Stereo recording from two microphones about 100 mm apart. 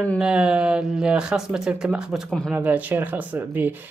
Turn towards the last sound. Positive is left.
turn(degrees=-20)  # may be behind; listen again after turning